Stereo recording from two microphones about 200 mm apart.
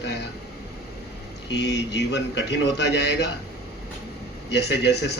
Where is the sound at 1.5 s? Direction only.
60° left (ahead or behind).